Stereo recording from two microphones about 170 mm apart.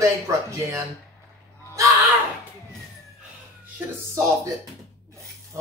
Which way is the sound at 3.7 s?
15° right (ahead or behind).